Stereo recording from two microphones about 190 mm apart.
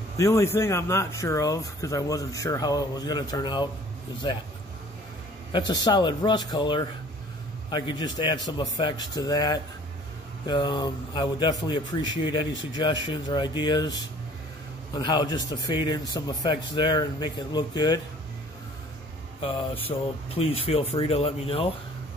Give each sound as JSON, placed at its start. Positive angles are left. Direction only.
{"t": 0.2, "sound": "a man's voice", "side_deg": 15}
{"t": 5.5, "sound": "a man's voice", "side_deg": 25}
{"t": 15.0, "sound": "a man's voice", "side_deg": 20}
{"t": 19.4, "sound": "a man's voice", "side_deg": 30}